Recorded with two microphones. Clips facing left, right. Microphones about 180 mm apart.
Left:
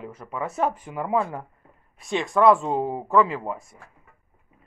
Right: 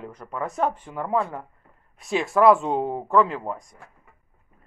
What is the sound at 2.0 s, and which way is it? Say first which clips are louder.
Speech: right 1 dB; 5° right (ahead or behind).